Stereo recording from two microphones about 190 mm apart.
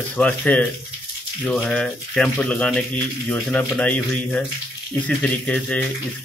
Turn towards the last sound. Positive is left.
turn(degrees=5)  # may be behind; listen again after turning